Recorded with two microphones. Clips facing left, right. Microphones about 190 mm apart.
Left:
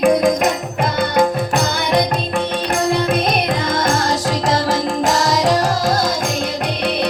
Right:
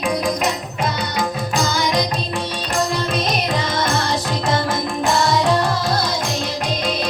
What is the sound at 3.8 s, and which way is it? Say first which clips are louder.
Music: left 3 dB; 45° left (ahead or behind).